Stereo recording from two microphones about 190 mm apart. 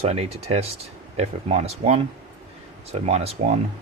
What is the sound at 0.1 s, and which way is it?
Speech, 35° right (ahead or behind).